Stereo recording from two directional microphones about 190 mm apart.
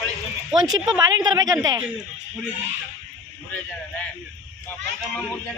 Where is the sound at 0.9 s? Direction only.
20° right (ahead or behind).